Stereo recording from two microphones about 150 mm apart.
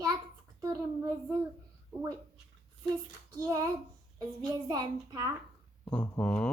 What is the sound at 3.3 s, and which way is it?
A child's voice, 25° right (ahead or behind).